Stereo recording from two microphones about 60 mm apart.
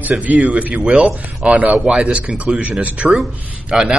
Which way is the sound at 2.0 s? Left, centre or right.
Centre.